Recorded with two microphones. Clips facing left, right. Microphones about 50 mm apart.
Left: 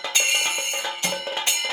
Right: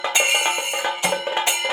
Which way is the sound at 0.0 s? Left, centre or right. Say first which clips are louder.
Right 4 dB; centre.